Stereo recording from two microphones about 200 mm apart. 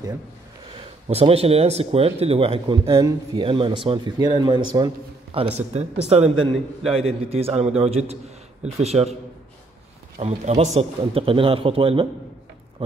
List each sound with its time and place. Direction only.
1.0 s a man's voice: 30° right (ahead or behind)
6.5 s a man's voice: centre (ahead or behind)
7.0 s a man's voice: 30° right (ahead or behind)
10.1 s speech: 35° right (ahead or behind)